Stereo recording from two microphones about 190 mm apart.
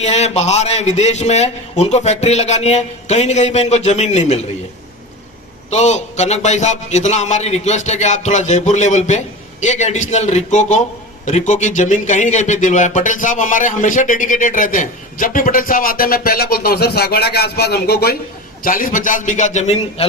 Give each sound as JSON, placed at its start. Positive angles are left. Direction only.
{"t": 0.0, "sound": "a man's voice", "side_deg": 35}
{"t": 5.7, "sound": "a man's voice", "side_deg": 35}